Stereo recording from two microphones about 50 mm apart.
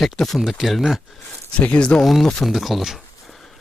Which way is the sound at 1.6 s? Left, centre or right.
Left.